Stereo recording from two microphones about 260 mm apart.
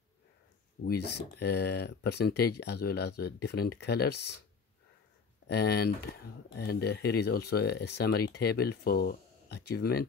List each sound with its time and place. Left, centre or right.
0.8 s speech: left
5.5 s speech: left